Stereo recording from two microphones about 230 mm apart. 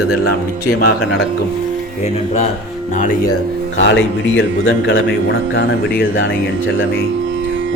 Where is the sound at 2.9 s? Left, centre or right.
Left.